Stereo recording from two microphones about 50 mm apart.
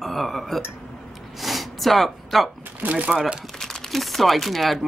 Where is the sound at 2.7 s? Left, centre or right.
Right.